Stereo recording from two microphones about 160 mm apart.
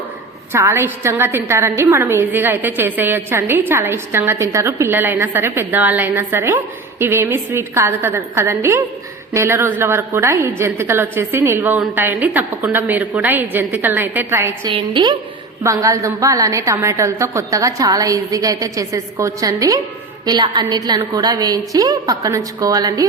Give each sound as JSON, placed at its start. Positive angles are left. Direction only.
{"t": 0.5, "sound": "a woman's voice", "side_deg": -15}
{"t": 14.7, "sound": "a woman's voice", "side_deg": -30}
{"t": 15.6, "sound": "a woman's voice", "side_deg": -20}